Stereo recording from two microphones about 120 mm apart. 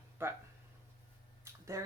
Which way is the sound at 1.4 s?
25° right (ahead or behind).